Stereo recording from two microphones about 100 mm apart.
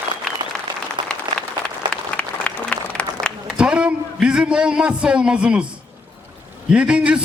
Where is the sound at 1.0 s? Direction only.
50° right (ahead or behind).